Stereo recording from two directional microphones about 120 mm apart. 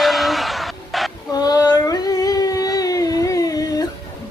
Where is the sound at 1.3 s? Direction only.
35° left (ahead or behind).